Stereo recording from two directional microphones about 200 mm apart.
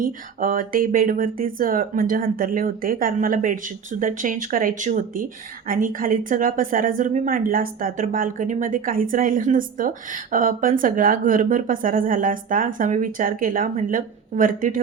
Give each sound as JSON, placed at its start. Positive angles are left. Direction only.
{"t": 0.0, "sound": "speech", "side_deg": -45}